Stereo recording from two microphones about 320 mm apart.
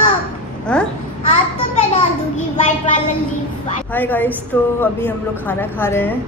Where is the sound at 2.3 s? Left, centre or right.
Left.